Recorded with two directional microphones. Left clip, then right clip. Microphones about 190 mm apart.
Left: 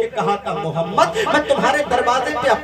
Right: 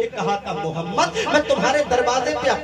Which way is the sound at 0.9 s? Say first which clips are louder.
Left 3 dB; 25° left (ahead or behind).